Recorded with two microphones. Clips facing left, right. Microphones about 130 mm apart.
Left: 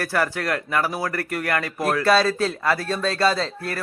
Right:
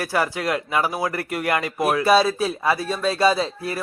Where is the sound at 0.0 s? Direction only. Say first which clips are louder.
Right 1 dB; 10° right (ahead or behind).